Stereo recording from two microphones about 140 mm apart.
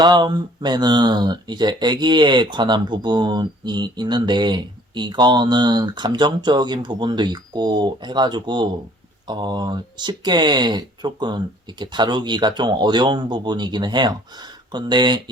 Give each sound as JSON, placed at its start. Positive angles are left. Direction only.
{"t": 0.0, "sound": "speech", "side_deg": -30}